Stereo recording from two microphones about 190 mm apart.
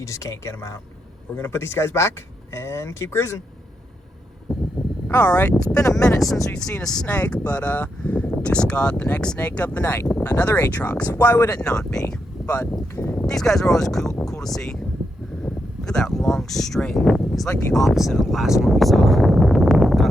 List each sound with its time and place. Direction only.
0.0 s speech: 15° left (ahead or behind)
5.0 s speech: 10° left (ahead or behind)
12.5 s speech: 15° left (ahead or behind); by 17.5 s centre (ahead or behind)
17.7 s a sound: centre (ahead or behind)